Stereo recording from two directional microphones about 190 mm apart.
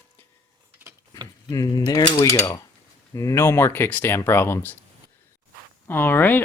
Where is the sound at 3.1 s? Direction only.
15° left (ahead or behind).